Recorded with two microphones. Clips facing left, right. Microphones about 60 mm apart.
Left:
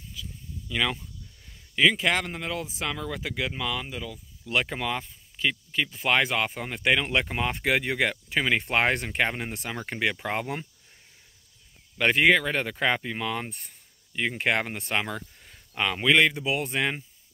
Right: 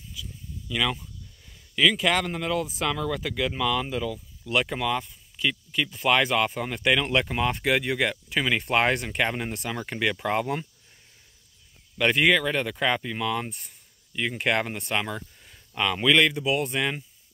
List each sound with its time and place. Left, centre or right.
0.2 s a sound: left
0.7 s speech: left
3.8 s speech: centre
4.5 s speech: left
12.0 s speech: left
15.5 s speech: left